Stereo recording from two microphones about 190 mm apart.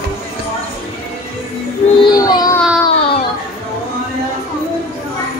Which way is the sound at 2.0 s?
20° left (ahead or behind).